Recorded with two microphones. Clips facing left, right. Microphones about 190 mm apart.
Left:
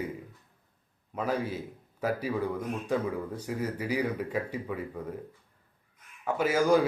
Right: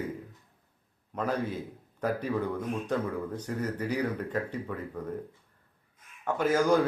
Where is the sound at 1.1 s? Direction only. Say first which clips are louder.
Even; 5° left (ahead or behind).